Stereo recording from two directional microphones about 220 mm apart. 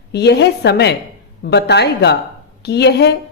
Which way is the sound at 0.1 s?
50° left (ahead or behind).